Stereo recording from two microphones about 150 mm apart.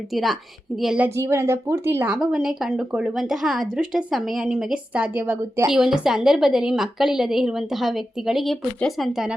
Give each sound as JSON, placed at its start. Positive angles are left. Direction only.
{"t": 0.1, "sound": "a woman's voice", "side_deg": 0}
{"t": 2.1, "sound": "a woman's voice", "side_deg": -5}
{"t": 5.6, "sound": "a woman's voice", "side_deg": -5}